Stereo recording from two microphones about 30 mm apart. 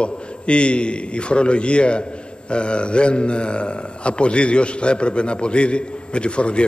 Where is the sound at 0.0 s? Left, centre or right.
Left.